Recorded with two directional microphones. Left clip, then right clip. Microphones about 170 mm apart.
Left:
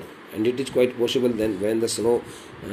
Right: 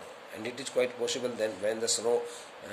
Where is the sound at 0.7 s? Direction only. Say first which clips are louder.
Left 5 dB; centre (ahead or behind).